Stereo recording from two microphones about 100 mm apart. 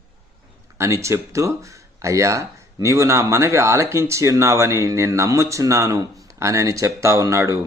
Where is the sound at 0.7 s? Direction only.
30° right (ahead or behind).